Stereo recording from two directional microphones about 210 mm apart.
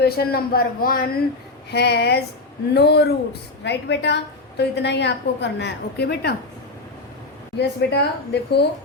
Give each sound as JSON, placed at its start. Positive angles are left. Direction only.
{"t": 0.0, "sound": "a woman's voice", "side_deg": 50}
{"t": 7.5, "sound": "a woman's voice", "side_deg": 55}